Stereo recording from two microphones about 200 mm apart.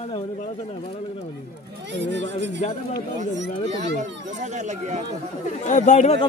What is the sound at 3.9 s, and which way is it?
Speech, 35° right (ahead or behind).